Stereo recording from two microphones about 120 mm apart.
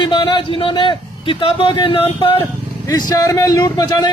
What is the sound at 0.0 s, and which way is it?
A man's voice, 40° left (ahead or behind).